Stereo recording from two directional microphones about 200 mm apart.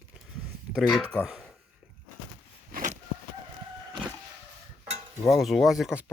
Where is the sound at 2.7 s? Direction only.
40° right (ahead or behind).